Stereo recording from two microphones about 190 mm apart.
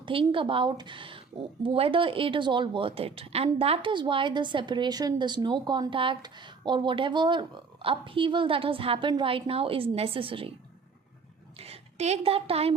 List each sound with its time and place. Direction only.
0.0 s speech: 25° right (ahead or behind)
11.6 s a woman's voice: 35° right (ahead or behind)